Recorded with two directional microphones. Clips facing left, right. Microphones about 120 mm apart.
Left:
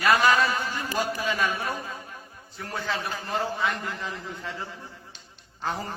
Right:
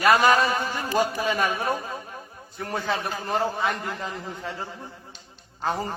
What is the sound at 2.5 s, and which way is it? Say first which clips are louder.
A man's voice: right 4 dB; 50° right (ahead or behind).